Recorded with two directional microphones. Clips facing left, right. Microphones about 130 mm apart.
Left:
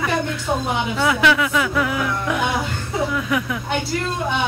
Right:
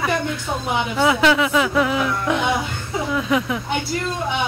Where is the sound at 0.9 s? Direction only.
25° right (ahead or behind).